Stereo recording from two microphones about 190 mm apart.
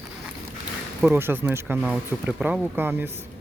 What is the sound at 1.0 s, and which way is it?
Speech, 10° right (ahead or behind).